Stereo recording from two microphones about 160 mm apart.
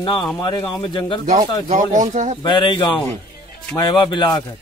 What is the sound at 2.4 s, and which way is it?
Speech, 30° left (ahead or behind).